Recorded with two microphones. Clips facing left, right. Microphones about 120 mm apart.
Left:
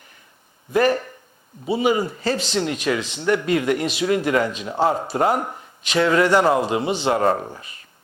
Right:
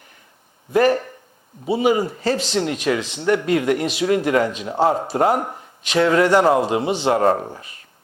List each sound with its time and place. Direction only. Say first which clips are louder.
0.7 s speech: right 2 dB; 50° right (ahead or behind)
7.2 s speech: right 3 dB; 40° right (ahead or behind)